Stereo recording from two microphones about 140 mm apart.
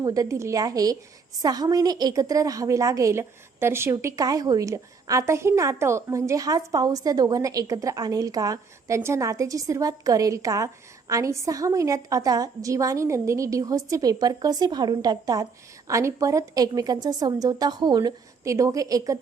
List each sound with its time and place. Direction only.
0.0 s a woman's voice: 25° right (ahead or behind)